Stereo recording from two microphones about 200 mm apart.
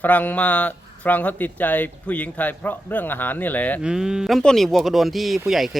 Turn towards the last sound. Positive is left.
turn(degrees=0)  # may be behind; listen again after turning